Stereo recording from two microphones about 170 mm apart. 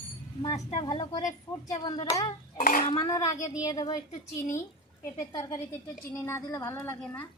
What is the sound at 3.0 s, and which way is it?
A woman's voice, 20° left (ahead or behind).